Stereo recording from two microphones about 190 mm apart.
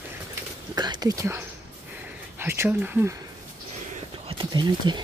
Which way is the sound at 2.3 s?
15° right (ahead or behind).